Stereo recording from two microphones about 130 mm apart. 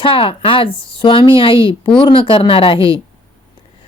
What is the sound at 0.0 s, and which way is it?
Speech, 45° left (ahead or behind).